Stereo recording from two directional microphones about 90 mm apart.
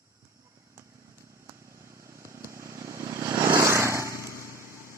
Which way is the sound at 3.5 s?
30° right (ahead or behind).